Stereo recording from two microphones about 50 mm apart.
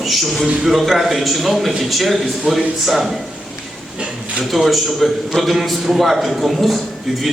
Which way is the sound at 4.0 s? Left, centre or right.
Centre.